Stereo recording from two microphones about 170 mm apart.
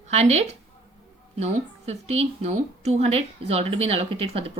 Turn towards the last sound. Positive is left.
turn(degrees=-35)  # may be behind; listen again after turning